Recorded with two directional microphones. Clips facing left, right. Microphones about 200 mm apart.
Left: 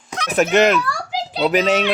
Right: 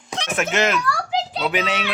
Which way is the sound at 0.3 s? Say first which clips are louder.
Left 7 dB; 35° left (ahead or behind).